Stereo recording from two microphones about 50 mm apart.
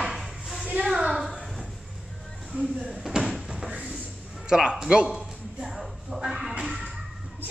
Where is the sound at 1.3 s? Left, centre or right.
Centre.